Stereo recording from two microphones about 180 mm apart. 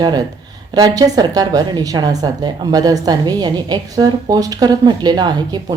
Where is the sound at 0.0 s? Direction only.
25° right (ahead or behind).